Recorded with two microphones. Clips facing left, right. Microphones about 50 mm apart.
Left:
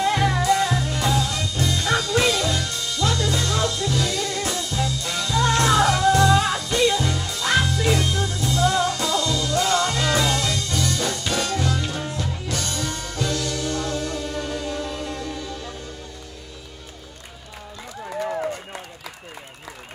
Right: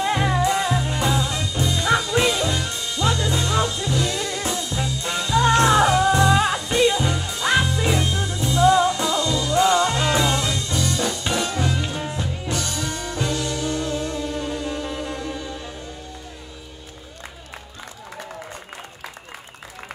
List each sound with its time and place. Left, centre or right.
0.0 s music: right